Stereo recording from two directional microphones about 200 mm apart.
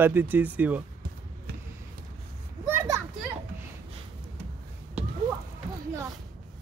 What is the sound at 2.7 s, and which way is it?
Children playing, 10° right (ahead or behind).